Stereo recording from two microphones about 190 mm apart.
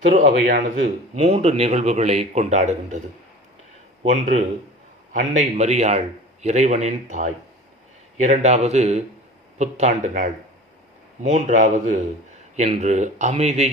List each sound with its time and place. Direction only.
0.0 s a man's voice: 40° right (ahead or behind)
1.1 s speech: 35° right (ahead or behind)
4.1 s speech: 35° right (ahead or behind)